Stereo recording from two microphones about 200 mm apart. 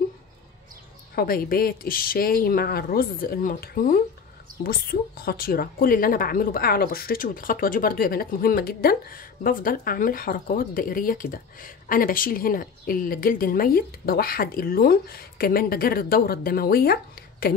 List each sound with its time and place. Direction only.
1.1 s a woman's voice: 50° left (ahead or behind)